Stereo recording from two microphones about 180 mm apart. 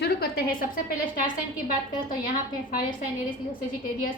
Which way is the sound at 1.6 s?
50° left (ahead or behind).